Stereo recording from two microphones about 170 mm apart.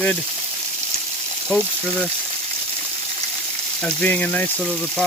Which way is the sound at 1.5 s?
5° left (ahead or behind).